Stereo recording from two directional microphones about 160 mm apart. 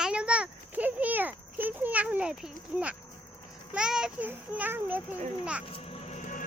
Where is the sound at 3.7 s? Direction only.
5° right (ahead or behind).